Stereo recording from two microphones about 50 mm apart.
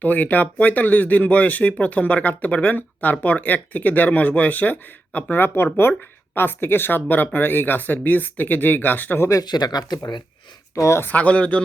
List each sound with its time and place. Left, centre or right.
0.0 s speech: left
10.8 s speech: left
11.1 s speech: left